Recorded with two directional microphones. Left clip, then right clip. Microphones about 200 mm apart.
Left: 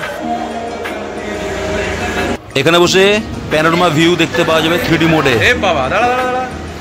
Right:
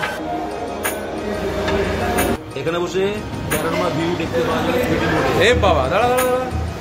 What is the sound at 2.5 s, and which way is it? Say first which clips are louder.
Speech: left 11 dB; 50° left (ahead or behind).